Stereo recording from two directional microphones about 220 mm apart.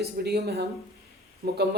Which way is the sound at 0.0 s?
45° right (ahead or behind).